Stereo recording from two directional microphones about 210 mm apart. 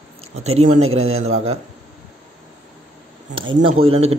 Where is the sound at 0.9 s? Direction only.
30° right (ahead or behind).